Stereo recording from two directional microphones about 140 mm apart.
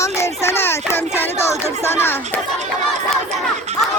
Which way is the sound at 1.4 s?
15° left (ahead or behind).